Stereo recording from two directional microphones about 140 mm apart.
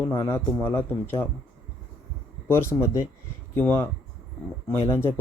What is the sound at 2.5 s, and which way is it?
Speech, 20° left (ahead or behind).